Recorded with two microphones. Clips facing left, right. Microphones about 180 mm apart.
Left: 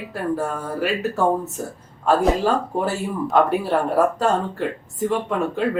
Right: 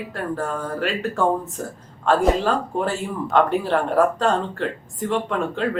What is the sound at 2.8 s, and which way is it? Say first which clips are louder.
Speech: left 1 dB; 5° left (ahead or behind).